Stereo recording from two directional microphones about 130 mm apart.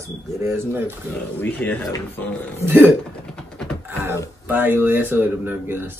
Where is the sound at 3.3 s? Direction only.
5° left (ahead or behind).